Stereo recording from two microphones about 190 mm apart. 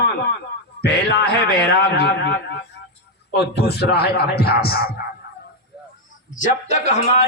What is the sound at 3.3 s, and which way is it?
A man's voice, 60° left (ahead or behind).